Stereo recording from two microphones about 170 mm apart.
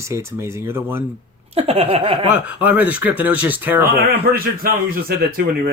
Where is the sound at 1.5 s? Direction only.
35° right (ahead or behind).